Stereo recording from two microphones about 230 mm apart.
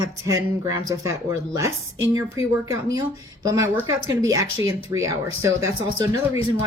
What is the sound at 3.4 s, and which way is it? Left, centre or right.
Speech, centre.